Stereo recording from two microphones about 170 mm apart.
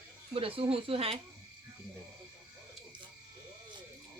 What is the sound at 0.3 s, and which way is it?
Speech, 35° right (ahead or behind).